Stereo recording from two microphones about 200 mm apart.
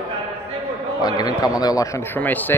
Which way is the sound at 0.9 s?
20° left (ahead or behind).